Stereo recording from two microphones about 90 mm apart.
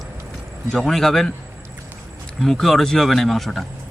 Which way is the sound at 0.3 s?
5° left (ahead or behind).